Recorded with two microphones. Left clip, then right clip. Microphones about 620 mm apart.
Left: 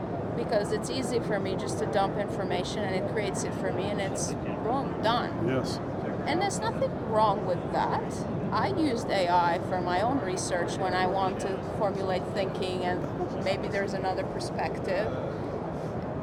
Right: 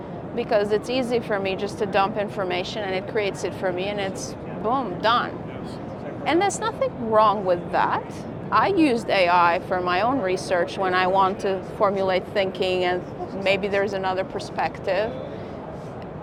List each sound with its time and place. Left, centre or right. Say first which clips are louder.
0.5 s speech: right 8 dB; right
6.3 s speech: right 8 dB; right